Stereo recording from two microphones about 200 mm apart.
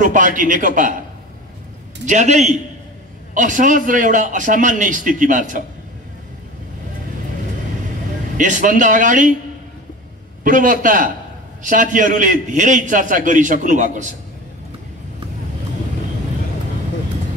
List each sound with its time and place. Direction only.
0.0 s a man's voice: 40° right (ahead or behind)
2.0 s a man's voice: 35° right (ahead or behind)
8.4 s a man's voice: 40° right (ahead or behind)
10.4 s a man's voice: 40° right (ahead or behind)